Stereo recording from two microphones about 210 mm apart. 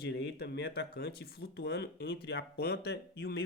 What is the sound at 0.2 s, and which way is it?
A man's voice, 55° left (ahead or behind).